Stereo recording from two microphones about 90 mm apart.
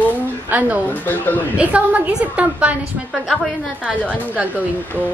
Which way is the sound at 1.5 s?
15° right (ahead or behind).